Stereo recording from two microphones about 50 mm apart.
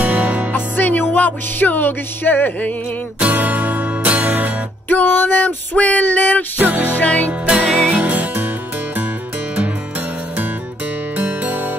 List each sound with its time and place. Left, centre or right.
0.0 s music: right
0.5 s music: left
3.2 s music: right
4.8 s music: left
6.6 s music: right
7.0 s music: left
7.4 s music: right
11.1 s music: right